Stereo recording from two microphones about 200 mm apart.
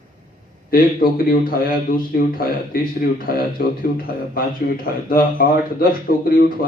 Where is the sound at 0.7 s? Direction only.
45° left (ahead or behind).